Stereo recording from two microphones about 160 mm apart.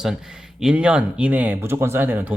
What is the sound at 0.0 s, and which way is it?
Speech, 5° right (ahead or behind).